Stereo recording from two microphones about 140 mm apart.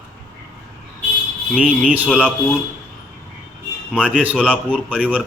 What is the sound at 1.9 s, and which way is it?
Speech, 10° right (ahead or behind).